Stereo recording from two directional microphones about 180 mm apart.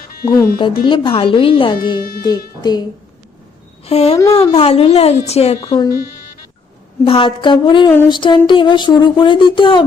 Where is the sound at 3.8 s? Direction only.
35° left (ahead or behind).